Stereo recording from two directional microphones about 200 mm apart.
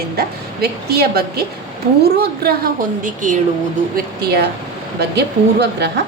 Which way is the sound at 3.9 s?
50° right (ahead or behind).